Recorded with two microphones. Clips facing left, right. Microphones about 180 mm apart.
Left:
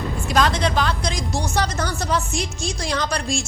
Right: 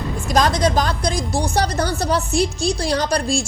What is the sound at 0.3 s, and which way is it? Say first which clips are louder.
A woman's voice: right 3 dB; 40° right (ahead or behind).